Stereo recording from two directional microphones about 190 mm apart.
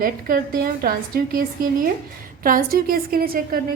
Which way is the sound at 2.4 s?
50° right (ahead or behind).